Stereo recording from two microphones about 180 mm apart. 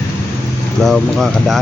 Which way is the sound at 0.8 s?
Centre (ahead or behind).